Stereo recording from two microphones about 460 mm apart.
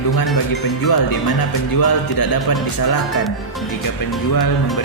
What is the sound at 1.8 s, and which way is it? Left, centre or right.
Music, left.